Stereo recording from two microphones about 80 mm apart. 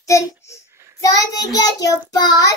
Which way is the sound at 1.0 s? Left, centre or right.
Left.